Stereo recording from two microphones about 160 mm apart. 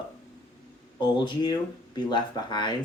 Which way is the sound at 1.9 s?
25° left (ahead or behind).